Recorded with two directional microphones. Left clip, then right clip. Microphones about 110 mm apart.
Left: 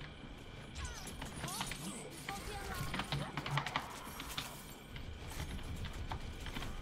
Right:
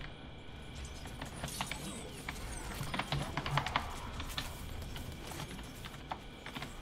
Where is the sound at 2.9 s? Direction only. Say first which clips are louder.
Right 6 dB; 20° right (ahead or behind).